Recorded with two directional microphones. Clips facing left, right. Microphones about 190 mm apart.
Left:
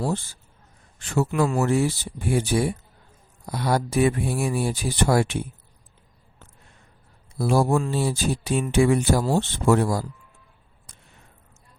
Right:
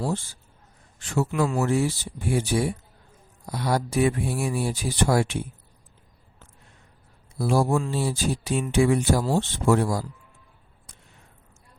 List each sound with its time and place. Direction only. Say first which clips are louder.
1.0 s speech: left 2 dB; 60° left (ahead or behind)
7.3 s speech: left 2 dB; 60° left (ahead or behind)